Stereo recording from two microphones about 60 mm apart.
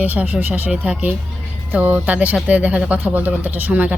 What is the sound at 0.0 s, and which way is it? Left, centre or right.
Speech, right.